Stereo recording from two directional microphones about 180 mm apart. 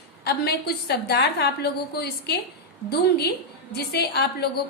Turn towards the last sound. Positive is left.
turn(degrees=65)  # may be behind; listen again after turning